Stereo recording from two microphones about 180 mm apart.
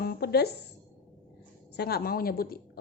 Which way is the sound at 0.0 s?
60° left (ahead or behind).